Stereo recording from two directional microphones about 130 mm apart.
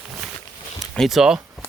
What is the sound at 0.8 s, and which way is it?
Speech, centre (ahead or behind).